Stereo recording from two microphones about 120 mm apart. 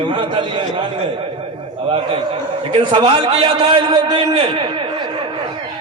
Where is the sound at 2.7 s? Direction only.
45° right (ahead or behind).